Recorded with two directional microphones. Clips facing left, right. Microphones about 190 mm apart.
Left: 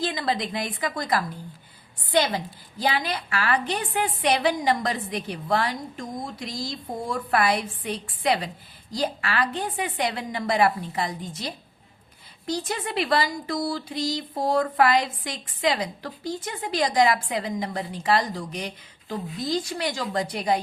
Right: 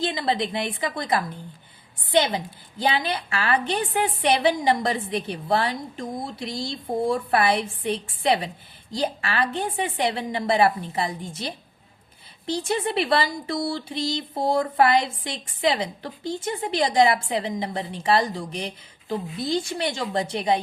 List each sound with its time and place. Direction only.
0.0 s a woman's voice: 30° right (ahead or behind)
19.0 s a woman's voice: centre (ahead or behind)
19.4 s a woman's voice: 30° right (ahead or behind)